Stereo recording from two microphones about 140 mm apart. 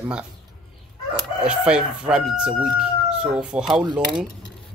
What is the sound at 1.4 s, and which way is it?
Speech, 5° right (ahead or behind).